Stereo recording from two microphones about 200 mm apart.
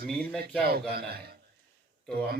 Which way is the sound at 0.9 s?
50° right (ahead or behind).